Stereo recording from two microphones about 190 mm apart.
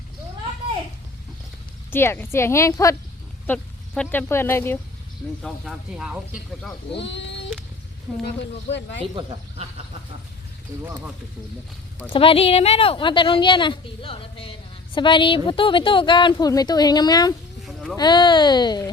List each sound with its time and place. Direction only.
1.9 s a woman's voice: 10° left (ahead or behind)
5.4 s speech: centre (ahead or behind)
7.0 s speech: 70° left (ahead or behind)
10.7 s speech: 15° right (ahead or behind)
12.1 s a woman's voice: 30° left (ahead or behind)
17.6 s a sound: centre (ahead or behind)
17.9 s a woman's voice: 25° left (ahead or behind)